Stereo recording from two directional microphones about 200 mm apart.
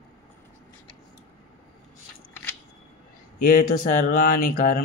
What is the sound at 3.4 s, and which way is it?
Speech, 45° left (ahead or behind).